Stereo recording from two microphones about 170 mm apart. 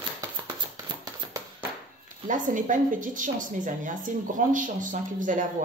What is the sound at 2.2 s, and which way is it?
A woman's voice, 50° right (ahead or behind).